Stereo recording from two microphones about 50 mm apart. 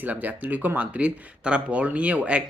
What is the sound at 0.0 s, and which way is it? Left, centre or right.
Speech, right.